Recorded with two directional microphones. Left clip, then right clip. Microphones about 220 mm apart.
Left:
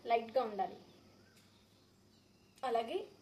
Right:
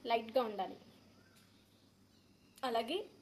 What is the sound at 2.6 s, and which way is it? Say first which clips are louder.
Speech: left 1 dB; 40° right (ahead or behind).